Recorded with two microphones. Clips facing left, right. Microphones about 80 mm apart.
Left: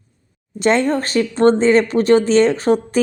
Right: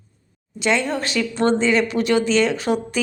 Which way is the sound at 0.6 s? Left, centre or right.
Left.